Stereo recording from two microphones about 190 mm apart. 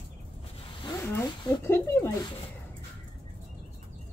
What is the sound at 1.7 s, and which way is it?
Speech, 10° left (ahead or behind).